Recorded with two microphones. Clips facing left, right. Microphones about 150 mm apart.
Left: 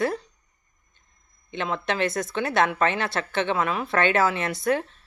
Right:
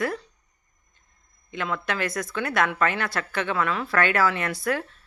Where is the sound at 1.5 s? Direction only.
25° left (ahead or behind).